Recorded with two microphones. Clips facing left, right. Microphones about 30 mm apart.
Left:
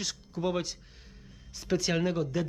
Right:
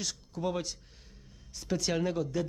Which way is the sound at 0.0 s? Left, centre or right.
Centre.